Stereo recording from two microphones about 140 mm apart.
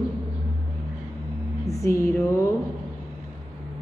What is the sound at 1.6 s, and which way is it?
Music, 20° left (ahead or behind).